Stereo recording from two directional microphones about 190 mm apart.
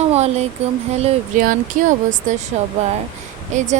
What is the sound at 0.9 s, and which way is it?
Speech, 40° right (ahead or behind).